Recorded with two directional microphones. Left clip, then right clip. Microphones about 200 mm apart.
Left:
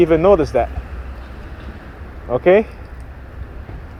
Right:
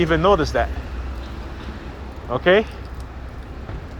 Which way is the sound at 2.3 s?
40° left (ahead or behind).